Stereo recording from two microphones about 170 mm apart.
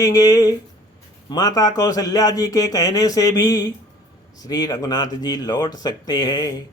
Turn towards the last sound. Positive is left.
turn(degrees=25)  # may be behind; listen again after turning